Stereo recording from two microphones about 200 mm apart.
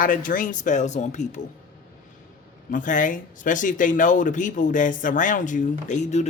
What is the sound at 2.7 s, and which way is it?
Speech, 40° left (ahead or behind).